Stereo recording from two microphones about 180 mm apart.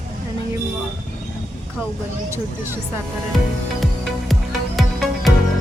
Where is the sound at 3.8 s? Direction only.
Centre (ahead or behind).